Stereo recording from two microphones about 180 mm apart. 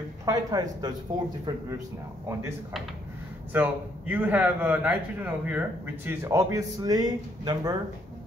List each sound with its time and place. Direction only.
0.2 s speech: 20° right (ahead or behind)
3.5 s a man's voice: 10° right (ahead or behind)